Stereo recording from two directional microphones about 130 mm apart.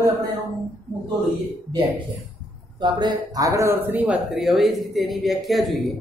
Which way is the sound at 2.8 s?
35° right (ahead or behind).